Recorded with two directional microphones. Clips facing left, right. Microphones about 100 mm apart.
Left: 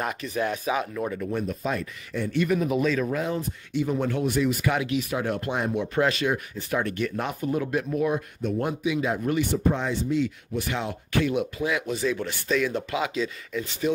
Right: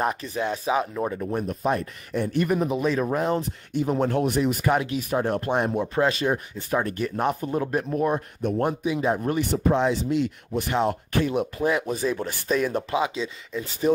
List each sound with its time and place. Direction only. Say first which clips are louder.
0.0 s speech: right 2 dB; 30° right (ahead or behind)
1.5 s speech: right 4 dB; 40° right (ahead or behind)
2.6 s speech: even; 25° right (ahead or behind)
3.7 s speech: right 3 dB; 45° right (ahead or behind)
5.9 s speech: right 1 dB; 30° right (ahead or behind)
9.7 s speech: right 3 dB; 65° right (ahead or behind)
10.7 s speech: right 6 dB; 45° right (ahead or behind)
12.9 s speech: right 2 dB; 25° right (ahead or behind)
13.8 s speech: right 4 dB; 35° right (ahead or behind)